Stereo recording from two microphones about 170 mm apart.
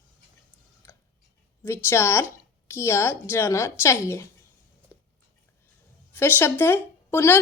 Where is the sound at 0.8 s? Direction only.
15° left (ahead or behind).